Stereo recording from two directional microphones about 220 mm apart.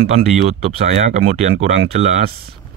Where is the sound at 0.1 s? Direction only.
30° right (ahead or behind).